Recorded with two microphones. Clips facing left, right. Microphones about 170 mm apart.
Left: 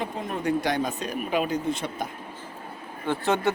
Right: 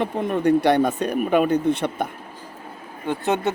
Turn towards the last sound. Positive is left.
turn(degrees=-20)  # may be behind; listen again after turning